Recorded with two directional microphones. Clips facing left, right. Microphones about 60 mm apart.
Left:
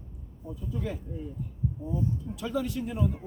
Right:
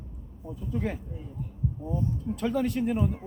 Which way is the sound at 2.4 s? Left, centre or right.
Right.